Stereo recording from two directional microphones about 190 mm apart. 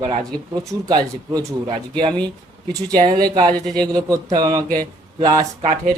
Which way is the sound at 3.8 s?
20° right (ahead or behind).